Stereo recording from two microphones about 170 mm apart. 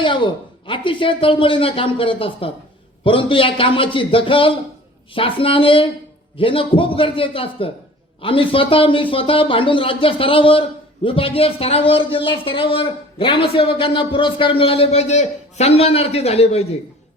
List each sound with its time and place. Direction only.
0.0 s speech: 30° left (ahead or behind)